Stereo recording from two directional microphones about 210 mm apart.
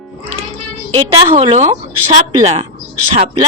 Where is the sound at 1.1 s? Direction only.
25° right (ahead or behind).